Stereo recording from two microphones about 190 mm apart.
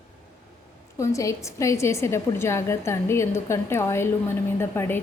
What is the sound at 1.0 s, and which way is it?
A woman's voice, 15° left (ahead or behind).